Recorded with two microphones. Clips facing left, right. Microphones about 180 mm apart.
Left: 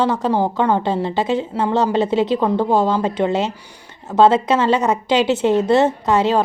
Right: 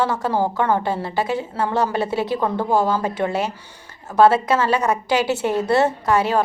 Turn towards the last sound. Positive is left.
turn(degrees=20)  # may be behind; listen again after turning